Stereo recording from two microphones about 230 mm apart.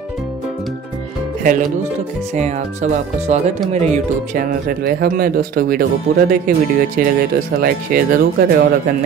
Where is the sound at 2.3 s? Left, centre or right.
Right.